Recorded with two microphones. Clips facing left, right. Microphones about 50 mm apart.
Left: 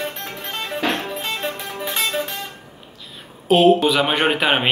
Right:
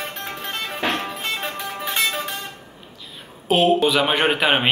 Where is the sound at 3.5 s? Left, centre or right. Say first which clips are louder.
Left 3 dB; centre.